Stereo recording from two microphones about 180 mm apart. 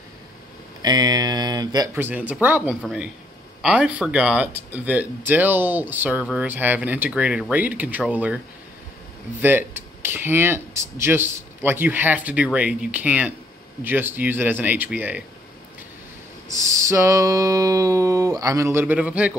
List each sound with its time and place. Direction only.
0.8 s speech: 20° right (ahead or behind)
2.0 s speech: 10° right (ahead or behind)
9.4 s speech: 10° right (ahead or behind)
16.4 s a sound: 15° right (ahead or behind)